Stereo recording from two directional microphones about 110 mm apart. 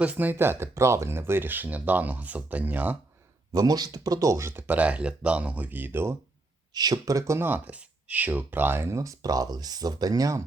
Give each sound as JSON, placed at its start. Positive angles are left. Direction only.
{"t": 0.0, "sound": "speech", "side_deg": -15}
{"t": 3.5, "sound": "speech", "side_deg": -35}
{"t": 6.7, "sound": "speech", "side_deg": -40}